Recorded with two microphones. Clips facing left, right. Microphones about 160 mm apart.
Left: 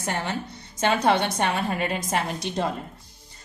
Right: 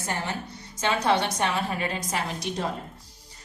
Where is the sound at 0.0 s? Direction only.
65° left (ahead or behind).